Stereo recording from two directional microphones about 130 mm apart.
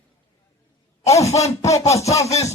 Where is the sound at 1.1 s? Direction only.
25° left (ahead or behind).